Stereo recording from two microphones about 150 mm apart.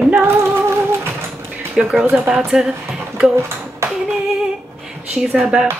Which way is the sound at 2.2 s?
15° right (ahead or behind).